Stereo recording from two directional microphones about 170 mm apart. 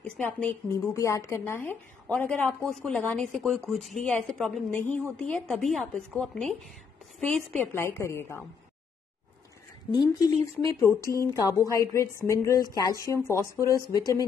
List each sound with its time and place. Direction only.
0.0 s a woman's voice: 10° left (ahead or behind)
9.8 s a woman's voice: 25° left (ahead or behind)